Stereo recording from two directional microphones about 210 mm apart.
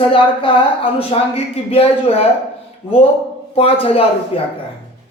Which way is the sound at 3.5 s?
25° left (ahead or behind).